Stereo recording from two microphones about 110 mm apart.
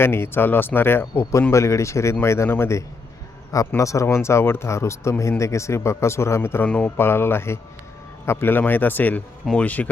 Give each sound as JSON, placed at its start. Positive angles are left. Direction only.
{"t": 0.0, "sound": "speech", "side_deg": 20}